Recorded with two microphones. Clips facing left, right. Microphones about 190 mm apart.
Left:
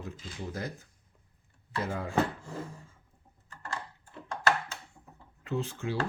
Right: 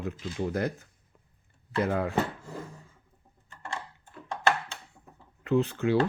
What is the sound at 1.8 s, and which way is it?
Speech, 60° right (ahead or behind).